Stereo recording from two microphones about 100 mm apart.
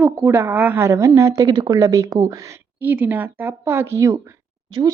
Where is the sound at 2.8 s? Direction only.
20° right (ahead or behind).